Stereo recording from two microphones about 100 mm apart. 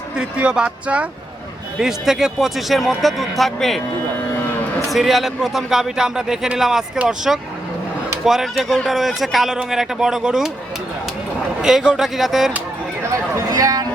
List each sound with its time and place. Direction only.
0.2 s a man's voice: 10° right (ahead or behind)
4.9 s a man's voice: centre (ahead or behind)
11.6 s a man's voice: 5° right (ahead or behind)
13.3 s a sound: 35° right (ahead or behind)